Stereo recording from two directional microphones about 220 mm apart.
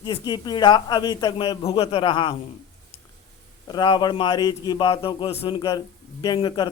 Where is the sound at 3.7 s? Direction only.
20° left (ahead or behind).